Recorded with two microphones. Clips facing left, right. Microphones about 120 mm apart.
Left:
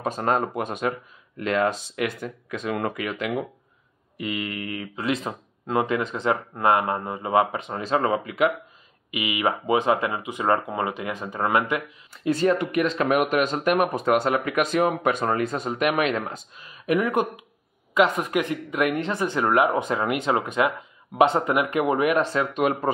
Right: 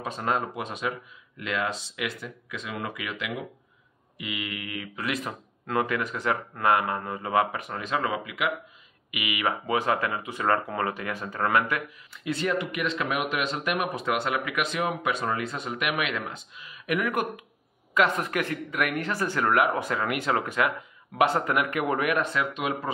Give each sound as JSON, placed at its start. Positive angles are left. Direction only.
{"t": 0.0, "sound": "speech", "side_deg": 45}
{"t": 9.1, "sound": "speech", "side_deg": 25}
{"t": 12.1, "sound": "speech", "side_deg": 40}
{"t": 22.5, "sound": "speech", "side_deg": 45}